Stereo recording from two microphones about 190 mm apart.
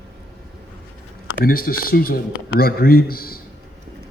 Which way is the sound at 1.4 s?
50° left (ahead or behind).